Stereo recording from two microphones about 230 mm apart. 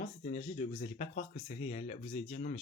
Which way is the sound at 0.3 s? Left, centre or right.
Left.